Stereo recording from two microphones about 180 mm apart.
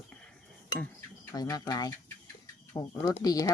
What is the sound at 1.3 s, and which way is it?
Speech, 20° left (ahead or behind).